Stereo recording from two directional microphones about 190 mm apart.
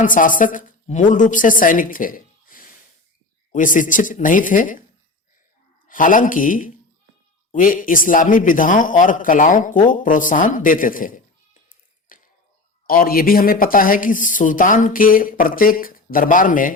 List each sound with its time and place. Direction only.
0.0 s a woman's voice: 45° left (ahead or behind)
5.9 s speech: 45° left (ahead or behind)
11.7 s a sound: 45° left (ahead or behind)
12.9 s speech: 50° left (ahead or behind)